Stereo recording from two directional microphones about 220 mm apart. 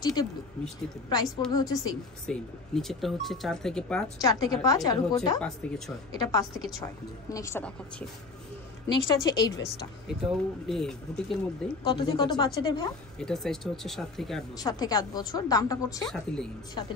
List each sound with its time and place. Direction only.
0.0 s speech: 20° left (ahead or behind)
2.2 s speech: centre (ahead or behind)
4.2 s speech: 15° left (ahead or behind)
6.8 s speech: 15° left (ahead or behind)
8.8 s speech: 20° left (ahead or behind)
9.7 s speech: centre (ahead or behind)
11.8 s a woman's voice: 20° left (ahead or behind)
13.2 s speech: centre (ahead or behind)
14.6 s speech: 15° left (ahead or behind)
16.1 s speech: centre (ahead or behind)
16.8 s a woman's voice: 20° left (ahead or behind)